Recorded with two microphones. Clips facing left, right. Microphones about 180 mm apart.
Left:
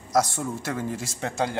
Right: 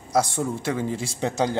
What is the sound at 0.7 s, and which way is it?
Speech, 20° right (ahead or behind).